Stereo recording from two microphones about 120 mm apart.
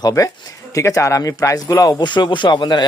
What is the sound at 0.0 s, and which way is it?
Speech, 30° left (ahead or behind).